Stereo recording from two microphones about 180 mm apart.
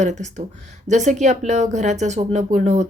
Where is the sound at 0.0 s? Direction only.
40° right (ahead or behind).